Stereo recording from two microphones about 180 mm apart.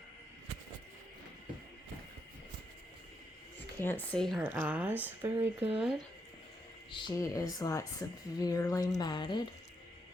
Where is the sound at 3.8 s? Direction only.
10° left (ahead or behind).